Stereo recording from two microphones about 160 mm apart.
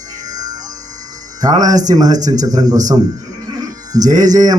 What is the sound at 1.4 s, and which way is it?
Speech, 20° right (ahead or behind).